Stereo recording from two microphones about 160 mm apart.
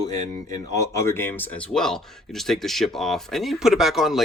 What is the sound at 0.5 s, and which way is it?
Speech, 20° left (ahead or behind).